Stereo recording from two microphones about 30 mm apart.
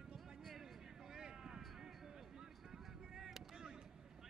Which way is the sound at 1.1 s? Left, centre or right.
Right.